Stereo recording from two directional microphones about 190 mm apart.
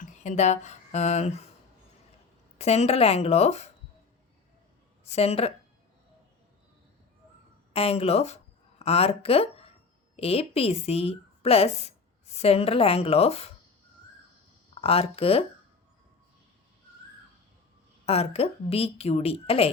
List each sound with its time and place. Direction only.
0.0 s speech: 40° left (ahead or behind)
2.6 s a woman's voice: 35° left (ahead or behind)
5.0 s a woman's voice: 35° left (ahead or behind)
7.7 s a woman's voice: 30° left (ahead or behind)
14.8 s a woman's voice: 30° left (ahead or behind)
18.0 s a woman's voice: 30° left (ahead or behind)